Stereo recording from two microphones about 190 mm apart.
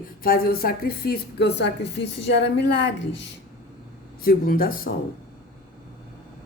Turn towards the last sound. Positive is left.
turn(degrees=50)  # may be behind; listen again after turning